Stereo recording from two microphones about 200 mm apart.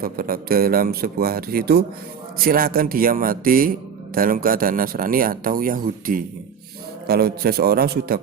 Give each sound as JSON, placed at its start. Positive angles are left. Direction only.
{"t": 0.0, "sound": "a man's voice", "side_deg": -45}